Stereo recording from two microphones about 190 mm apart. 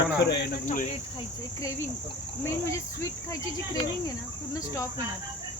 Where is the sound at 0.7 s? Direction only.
40° left (ahead or behind).